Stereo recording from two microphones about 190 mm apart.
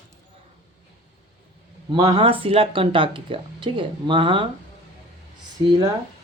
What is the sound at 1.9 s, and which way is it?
Speech, 25° right (ahead or behind).